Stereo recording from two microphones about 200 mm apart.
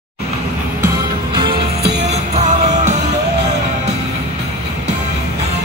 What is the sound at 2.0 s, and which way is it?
Music, 35° right (ahead or behind).